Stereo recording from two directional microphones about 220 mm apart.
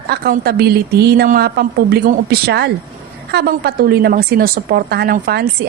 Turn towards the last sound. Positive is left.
turn(degrees=-45)  # may be behind; listen again after turning